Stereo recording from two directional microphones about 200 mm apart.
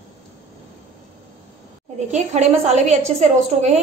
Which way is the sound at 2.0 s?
35° right (ahead or behind).